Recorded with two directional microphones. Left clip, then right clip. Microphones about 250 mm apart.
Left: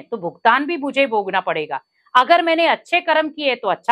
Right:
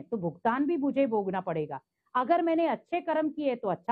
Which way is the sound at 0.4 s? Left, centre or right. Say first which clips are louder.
Left 13 dB; centre.